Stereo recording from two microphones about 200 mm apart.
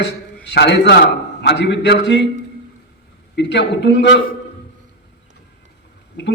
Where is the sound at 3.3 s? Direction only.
60° left (ahead or behind).